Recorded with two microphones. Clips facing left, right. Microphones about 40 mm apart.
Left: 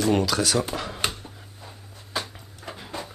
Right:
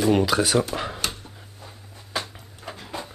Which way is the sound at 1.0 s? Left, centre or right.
Left.